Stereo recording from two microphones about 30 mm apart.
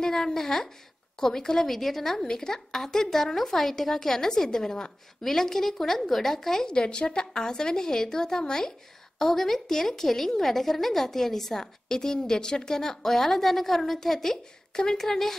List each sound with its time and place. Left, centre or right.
0.0 s a woman's voice: centre
5.2 s a woman's voice: centre
6.7 s a woman's voice: left
9.2 s a woman's voice: centre